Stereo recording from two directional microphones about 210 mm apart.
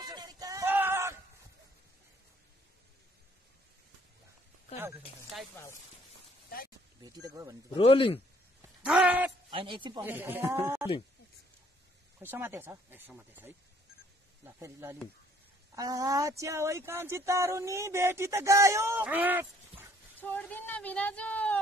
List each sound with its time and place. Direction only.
0.1 s a sound: 20° right (ahead or behind)
4.7 s speech: 10° right (ahead or behind)
7.1 s speech: 15° right (ahead or behind)
7.7 s speech: 25° left (ahead or behind)
8.8 s a sound: 5° right (ahead or behind)
9.5 s speech: 25° right (ahead or behind)
10.0 s speech: 10° right (ahead or behind)
12.2 s speech: 10° right (ahead or behind)
20.2 s a woman's voice: 10° left (ahead or behind)